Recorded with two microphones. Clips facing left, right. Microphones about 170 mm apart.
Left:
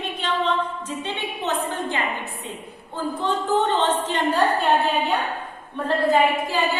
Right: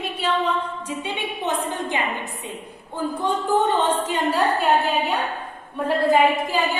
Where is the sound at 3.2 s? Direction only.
10° right (ahead or behind).